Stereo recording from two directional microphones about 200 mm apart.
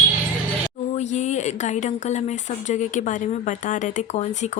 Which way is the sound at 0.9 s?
35° left (ahead or behind).